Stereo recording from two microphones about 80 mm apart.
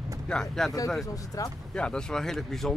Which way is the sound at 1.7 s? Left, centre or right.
Centre.